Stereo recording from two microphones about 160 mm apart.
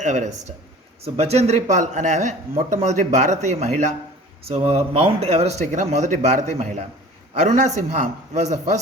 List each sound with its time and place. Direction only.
0.0 s a man's voice: 50° right (ahead or behind)